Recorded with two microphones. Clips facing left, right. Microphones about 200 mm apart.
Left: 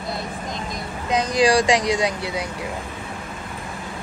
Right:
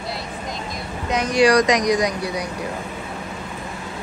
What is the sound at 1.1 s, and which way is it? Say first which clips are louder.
Speech: right 2 dB; 30° left (ahead or behind).